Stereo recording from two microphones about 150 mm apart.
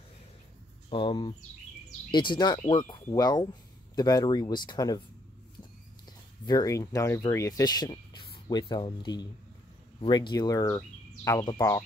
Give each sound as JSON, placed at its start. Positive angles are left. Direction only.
{"t": 0.8, "sound": "speech", "side_deg": 40}
{"t": 6.4, "sound": "speech", "side_deg": 25}